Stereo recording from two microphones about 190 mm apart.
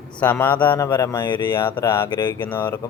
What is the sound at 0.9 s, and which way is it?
Speech, 25° left (ahead or behind).